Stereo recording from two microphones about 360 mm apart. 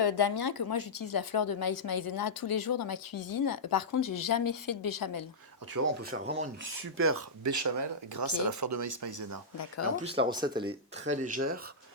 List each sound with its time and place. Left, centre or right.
0.0 s a woman's voice: left
5.7 s speech: right
6.1 s speech: right
6.9 s speech: right
7.4 s speech: right
9.9 s speech: centre